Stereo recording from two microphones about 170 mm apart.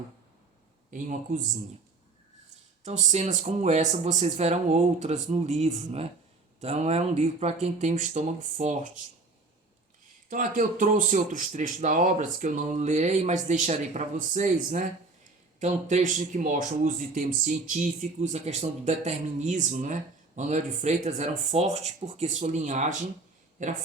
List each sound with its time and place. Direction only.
0.9 s speech: 45° right (ahead or behind)
2.8 s speech: 45° right (ahead or behind)
10.2 s speech: 50° right (ahead or behind)